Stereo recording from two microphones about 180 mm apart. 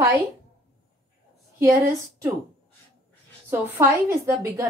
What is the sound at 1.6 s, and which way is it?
Speech, 15° right (ahead or behind).